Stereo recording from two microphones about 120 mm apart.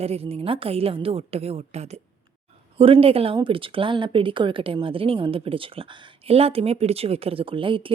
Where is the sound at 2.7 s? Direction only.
50° right (ahead or behind).